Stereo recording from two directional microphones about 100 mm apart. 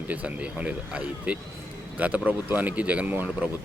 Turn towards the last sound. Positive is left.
turn(degrees=-15)  # may be behind; listen again after turning